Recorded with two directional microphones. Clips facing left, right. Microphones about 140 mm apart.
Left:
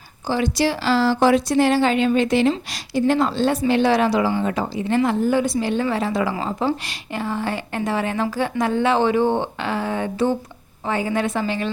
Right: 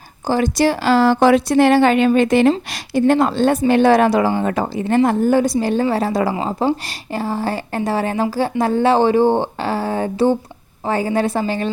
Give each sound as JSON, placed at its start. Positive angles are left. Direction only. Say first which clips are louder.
{"t": 0.3, "sound": "a woman's voice", "louder": "right 4 dB", "side_deg": -45}